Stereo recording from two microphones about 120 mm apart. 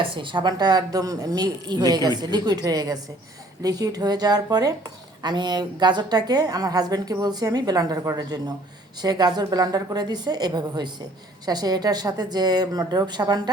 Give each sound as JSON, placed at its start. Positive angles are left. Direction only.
{"t": 0.0, "sound": "a woman's voice", "side_deg": -45}